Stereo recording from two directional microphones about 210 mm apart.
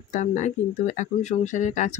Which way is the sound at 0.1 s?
35° left (ahead or behind).